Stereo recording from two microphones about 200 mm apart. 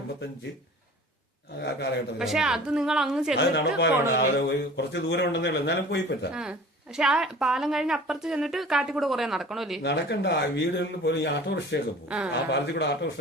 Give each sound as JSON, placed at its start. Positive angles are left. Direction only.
{"t": 1.6, "sound": "speech", "side_deg": 60}
{"t": 2.1, "sound": "a woman's voice", "side_deg": 0}
{"t": 3.3, "sound": "speech", "side_deg": 60}
{"t": 6.3, "sound": "a woman's voice", "side_deg": -5}
{"t": 9.8, "sound": "speech", "side_deg": 60}
{"t": 12.0, "sound": "a woman's voice", "side_deg": -5}
{"t": 12.3, "sound": "speech", "side_deg": 60}